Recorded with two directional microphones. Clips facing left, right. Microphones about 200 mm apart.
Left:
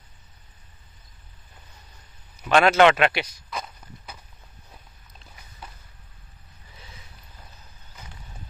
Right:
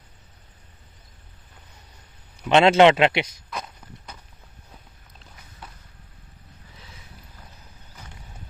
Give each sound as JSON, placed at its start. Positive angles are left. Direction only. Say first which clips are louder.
{"t": 2.4, "sound": "a man's voice", "louder": "right 2 dB", "side_deg": -25}
{"t": 3.4, "sound": "walk", "louder": "even", "side_deg": 0}